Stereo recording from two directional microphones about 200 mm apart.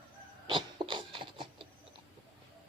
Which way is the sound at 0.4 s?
25° right (ahead or behind).